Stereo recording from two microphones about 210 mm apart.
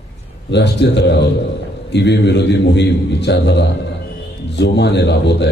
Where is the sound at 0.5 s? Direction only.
55° left (ahead or behind).